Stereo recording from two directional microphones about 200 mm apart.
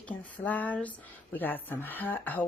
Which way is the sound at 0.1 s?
10° left (ahead or behind).